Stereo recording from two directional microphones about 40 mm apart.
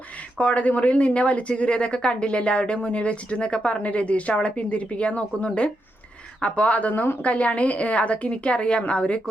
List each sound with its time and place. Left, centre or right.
0.3 s a woman's voice: left